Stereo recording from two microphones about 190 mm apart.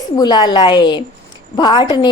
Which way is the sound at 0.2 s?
25° left (ahead or behind).